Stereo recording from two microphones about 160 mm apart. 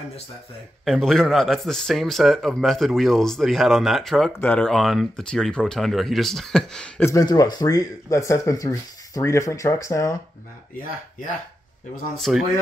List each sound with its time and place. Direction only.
0.8 s speech: centre (ahead or behind)
7.1 s speech: 20° left (ahead or behind)
10.8 s speech: 60° left (ahead or behind)
12.2 s speech: centre (ahead or behind)